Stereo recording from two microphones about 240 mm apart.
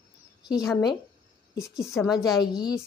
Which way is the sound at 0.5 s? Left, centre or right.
Centre.